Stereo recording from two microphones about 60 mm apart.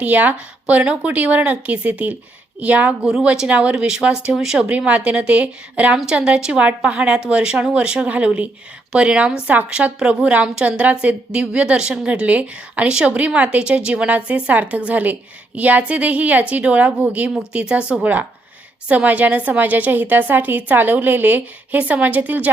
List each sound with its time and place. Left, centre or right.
0.0 s a woman's voice: right